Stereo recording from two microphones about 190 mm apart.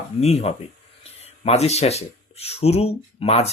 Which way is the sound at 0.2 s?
35° left (ahead or behind).